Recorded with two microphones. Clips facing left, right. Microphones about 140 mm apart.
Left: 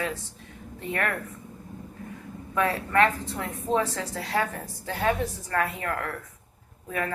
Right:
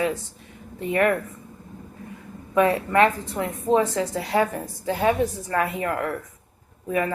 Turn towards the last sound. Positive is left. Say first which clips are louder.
# right 6 dB
turn(degrees=-15)  # may be behind; listen again after turning